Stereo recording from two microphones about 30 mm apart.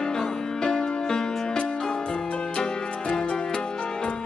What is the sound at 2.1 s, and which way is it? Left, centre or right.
Music, left.